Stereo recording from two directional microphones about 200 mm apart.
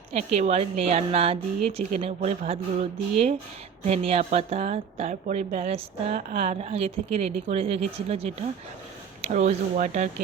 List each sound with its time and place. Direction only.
0.1 s speech: 30° right (ahead or behind)
3.8 s speech: 30° right (ahead or behind)